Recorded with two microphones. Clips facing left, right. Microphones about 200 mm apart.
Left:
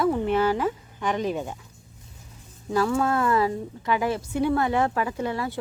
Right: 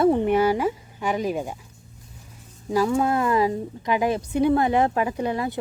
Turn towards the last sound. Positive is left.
turn(degrees=-20)  # may be behind; listen again after turning